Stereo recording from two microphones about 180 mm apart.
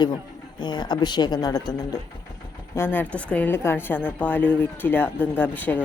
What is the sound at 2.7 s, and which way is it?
Speech, 10° left (ahead or behind).